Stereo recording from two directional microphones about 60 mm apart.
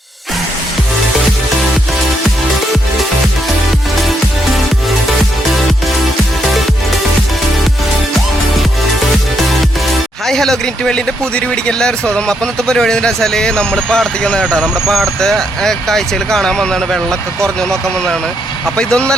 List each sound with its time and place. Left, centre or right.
10.2 s speech: centre
14.8 s speech: centre